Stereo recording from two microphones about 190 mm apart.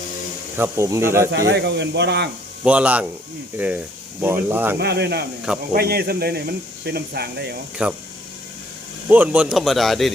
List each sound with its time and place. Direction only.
0.5 s speech: 15° right (ahead or behind)
1.3 s speech: 65° right (ahead or behind)
2.6 s speech: 5° right (ahead or behind)
4.8 s speech: 60° right (ahead or behind)
7.8 s speech: 5° right (ahead or behind)
9.0 s speech: 10° right (ahead or behind)